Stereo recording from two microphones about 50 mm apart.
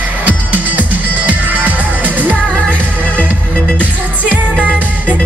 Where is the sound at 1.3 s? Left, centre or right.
Right.